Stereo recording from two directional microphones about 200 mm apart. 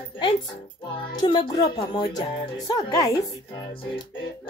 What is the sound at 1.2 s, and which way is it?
Speech, 20° left (ahead or behind).